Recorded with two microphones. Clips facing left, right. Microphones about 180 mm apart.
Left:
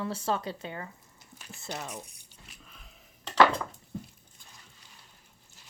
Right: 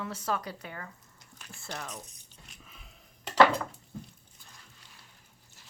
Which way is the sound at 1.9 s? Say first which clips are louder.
Left 2 dB; 10° left (ahead or behind).